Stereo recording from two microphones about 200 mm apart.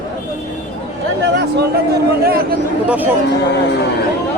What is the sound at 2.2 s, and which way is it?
Speech, 50° right (ahead or behind).